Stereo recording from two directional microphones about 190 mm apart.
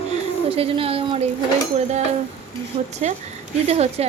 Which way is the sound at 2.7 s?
30° right (ahead or behind).